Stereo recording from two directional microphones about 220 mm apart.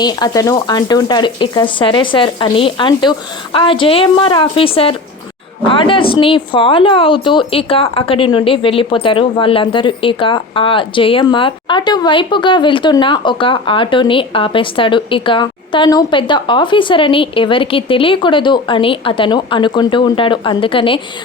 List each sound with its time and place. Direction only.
0.0 s speech: 20° left (ahead or behind)